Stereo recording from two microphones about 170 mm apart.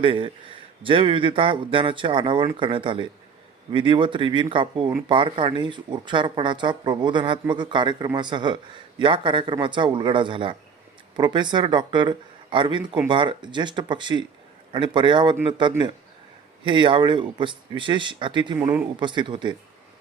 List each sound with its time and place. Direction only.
0.0 s speech: 30° right (ahead or behind)
18.6 s speech: 10° right (ahead or behind)
18.9 s speech: 25° right (ahead or behind)